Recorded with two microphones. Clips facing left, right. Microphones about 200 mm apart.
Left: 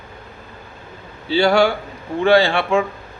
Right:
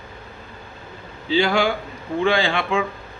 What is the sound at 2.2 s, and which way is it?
Speech, 45° left (ahead or behind).